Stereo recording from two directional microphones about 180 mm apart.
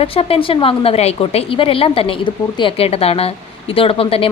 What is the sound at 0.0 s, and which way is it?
A woman's voice, 30° left (ahead or behind).